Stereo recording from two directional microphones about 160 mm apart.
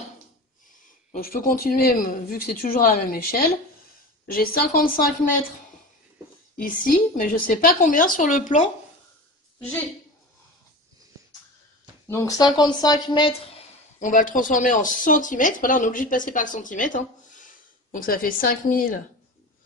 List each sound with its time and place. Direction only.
1.1 s speech: 60° left (ahead or behind)
6.5 s speech: 60° left (ahead or behind)
12.1 s speech: 20° left (ahead or behind)
13.9 s speech: 55° left (ahead or behind)